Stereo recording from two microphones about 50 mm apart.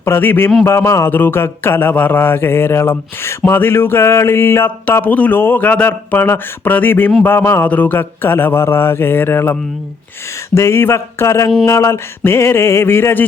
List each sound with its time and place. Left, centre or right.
0.0 s mantra: left
0.9 s a sound: left
1.1 s mantra: left
5.0 s speech: left
7.3 s mantra: left
7.6 s mantra: left
10.5 s a sound: left
11.6 s mantra: left